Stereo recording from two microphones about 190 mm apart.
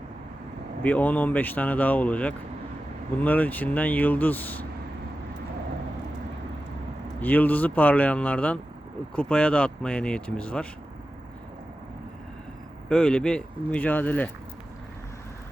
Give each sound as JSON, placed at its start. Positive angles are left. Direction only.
{"t": 0.8, "sound": "speech", "side_deg": 10}
{"t": 7.2, "sound": "speech", "side_deg": 10}
{"t": 12.9, "sound": "speech", "side_deg": 5}